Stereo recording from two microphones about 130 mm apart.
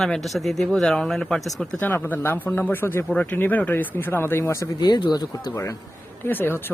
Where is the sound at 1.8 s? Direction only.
15° left (ahead or behind).